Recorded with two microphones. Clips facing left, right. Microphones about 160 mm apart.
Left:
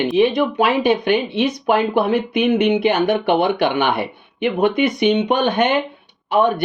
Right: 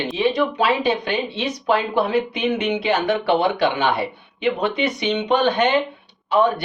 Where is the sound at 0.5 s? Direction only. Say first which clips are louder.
Left 3 dB; 55° left (ahead or behind).